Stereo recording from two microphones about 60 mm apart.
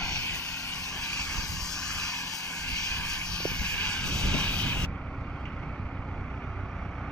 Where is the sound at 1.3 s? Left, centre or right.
Centre.